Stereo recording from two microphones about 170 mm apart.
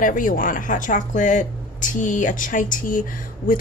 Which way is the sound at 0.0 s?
50° left (ahead or behind).